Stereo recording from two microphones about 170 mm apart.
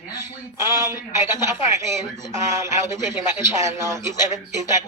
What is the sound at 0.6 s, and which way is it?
Speech, 15° right (ahead or behind).